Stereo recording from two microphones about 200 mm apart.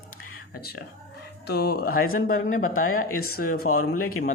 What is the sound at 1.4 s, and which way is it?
Speech, 50° left (ahead or behind).